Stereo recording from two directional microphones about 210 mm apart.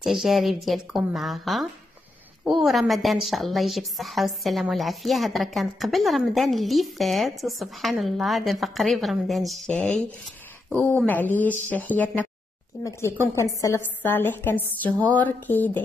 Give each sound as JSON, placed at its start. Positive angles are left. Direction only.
{"t": 0.0, "sound": "a woman's voice", "side_deg": 0}